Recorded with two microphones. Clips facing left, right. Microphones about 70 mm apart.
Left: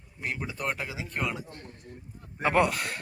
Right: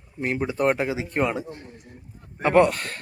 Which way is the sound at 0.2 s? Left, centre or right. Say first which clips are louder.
Right 10 dB; right.